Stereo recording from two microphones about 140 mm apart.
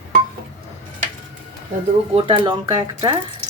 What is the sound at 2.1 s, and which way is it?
Speech, 40° right (ahead or behind).